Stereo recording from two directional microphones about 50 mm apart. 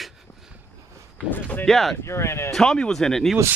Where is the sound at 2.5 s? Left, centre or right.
Centre.